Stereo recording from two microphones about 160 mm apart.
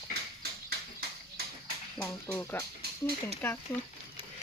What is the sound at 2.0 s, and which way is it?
Speech, 15° left (ahead or behind).